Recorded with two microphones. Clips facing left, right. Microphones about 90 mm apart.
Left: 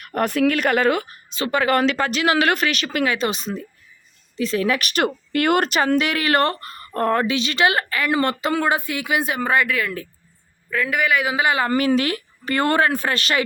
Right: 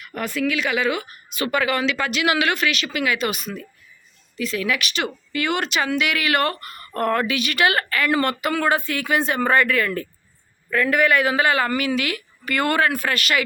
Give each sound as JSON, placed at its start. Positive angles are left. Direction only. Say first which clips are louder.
{"t": 0.0, "sound": "speech", "louder": "left 5 dB", "side_deg": 55}
{"t": 1.6, "sound": "a man's voice", "louder": "left 4 dB", "side_deg": 45}
{"t": 11.7, "sound": "speech", "louder": "left 4 dB", "side_deg": 35}